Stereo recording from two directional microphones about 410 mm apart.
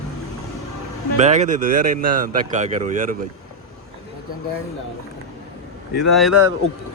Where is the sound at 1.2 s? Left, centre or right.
Centre.